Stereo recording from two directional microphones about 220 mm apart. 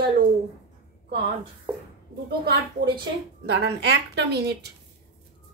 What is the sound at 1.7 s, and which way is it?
Speech, 5° right (ahead or behind).